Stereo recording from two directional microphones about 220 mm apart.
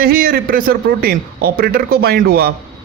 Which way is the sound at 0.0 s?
45° right (ahead or behind).